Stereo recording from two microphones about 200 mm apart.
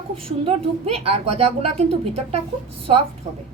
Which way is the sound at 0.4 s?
30° right (ahead or behind).